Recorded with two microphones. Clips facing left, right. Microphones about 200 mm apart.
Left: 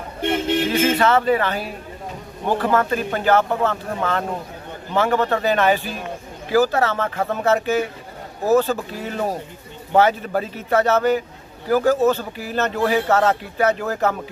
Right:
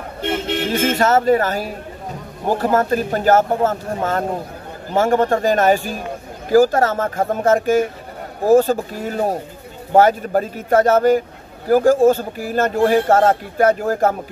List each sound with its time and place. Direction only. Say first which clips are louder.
0.9 s speech: right 3 dB; 45° right (ahead or behind)